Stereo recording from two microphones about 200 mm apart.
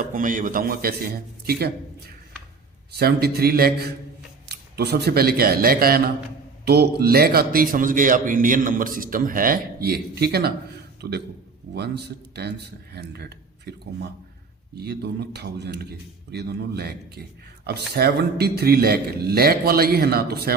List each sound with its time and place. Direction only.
0.0 s a man's voice: 45° right (ahead or behind)
3.0 s a man's voice: 50° right (ahead or behind)